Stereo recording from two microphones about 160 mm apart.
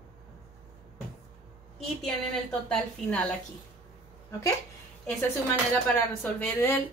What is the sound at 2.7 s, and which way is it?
Speech, 10° left (ahead or behind).